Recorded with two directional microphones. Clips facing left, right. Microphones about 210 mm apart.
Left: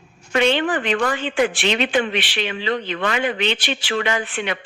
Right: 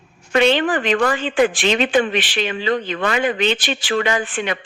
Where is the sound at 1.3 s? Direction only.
35° right (ahead or behind).